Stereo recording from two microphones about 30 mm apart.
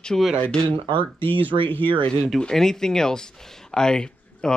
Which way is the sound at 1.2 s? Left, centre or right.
Left.